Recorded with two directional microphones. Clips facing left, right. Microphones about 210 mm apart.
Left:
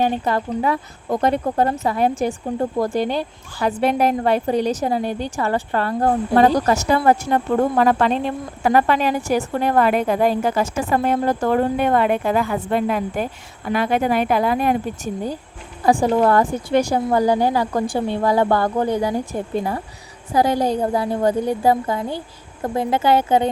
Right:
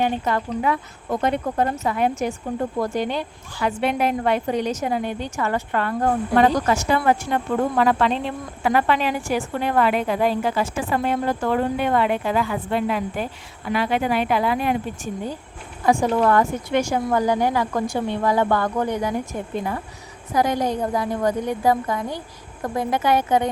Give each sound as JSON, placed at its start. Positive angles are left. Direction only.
{"t": 0.0, "sound": "a woman's voice", "side_deg": 35}